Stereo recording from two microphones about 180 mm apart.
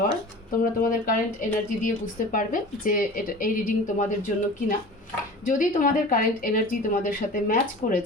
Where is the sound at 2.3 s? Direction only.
50° left (ahead or behind).